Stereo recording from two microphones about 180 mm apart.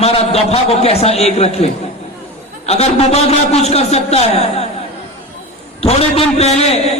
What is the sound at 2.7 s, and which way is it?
A man's voice, 35° left (ahead or behind).